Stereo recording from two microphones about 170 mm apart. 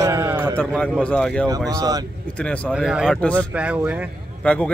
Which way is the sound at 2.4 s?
5° left (ahead or behind).